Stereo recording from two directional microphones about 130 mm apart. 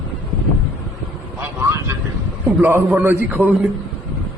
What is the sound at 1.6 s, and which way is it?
Vehicle, 25° right (ahead or behind).